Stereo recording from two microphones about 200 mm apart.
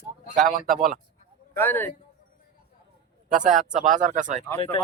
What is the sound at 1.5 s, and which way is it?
Speech, 10° left (ahead or behind).